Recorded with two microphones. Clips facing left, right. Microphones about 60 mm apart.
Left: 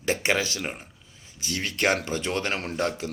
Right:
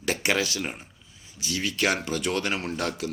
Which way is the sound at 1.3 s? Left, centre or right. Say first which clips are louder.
Right 1 dB; left.